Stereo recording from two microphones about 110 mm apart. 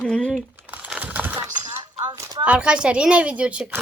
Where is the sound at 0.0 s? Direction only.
5° left (ahead or behind).